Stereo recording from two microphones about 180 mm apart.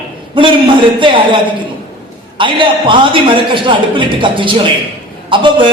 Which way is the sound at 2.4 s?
25° right (ahead or behind).